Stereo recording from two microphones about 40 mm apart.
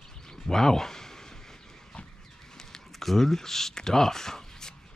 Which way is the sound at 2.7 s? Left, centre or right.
Centre.